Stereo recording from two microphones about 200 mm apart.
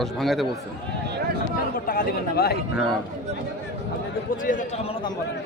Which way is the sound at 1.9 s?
50° left (ahead or behind).